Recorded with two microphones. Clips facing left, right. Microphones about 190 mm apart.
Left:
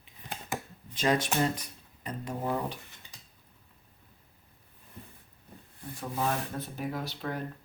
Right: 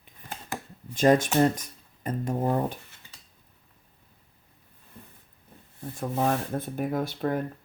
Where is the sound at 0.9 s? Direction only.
50° right (ahead or behind).